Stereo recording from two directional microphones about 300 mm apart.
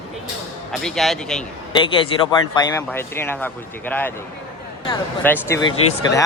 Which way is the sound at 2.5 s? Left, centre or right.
Centre.